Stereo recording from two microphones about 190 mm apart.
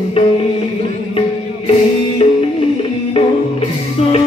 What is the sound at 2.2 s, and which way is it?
Music, 30° left (ahead or behind).